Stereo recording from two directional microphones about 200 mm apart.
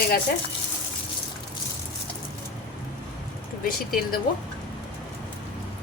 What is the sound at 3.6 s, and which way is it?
Speech, 45° left (ahead or behind).